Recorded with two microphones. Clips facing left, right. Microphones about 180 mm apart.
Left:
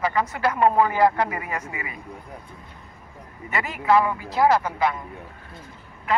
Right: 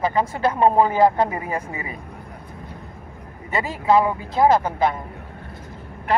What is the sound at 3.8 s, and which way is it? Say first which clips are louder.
Speech: right 2 dB; 20° right (ahead or behind).